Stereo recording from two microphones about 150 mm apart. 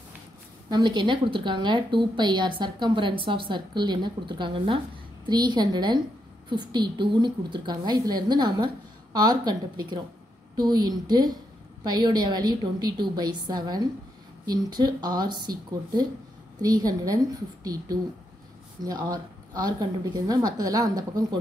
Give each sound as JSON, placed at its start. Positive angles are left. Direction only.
{"t": 0.7, "sound": "a woman's voice", "side_deg": -30}
{"t": 18.8, "sound": "a woman's voice", "side_deg": -25}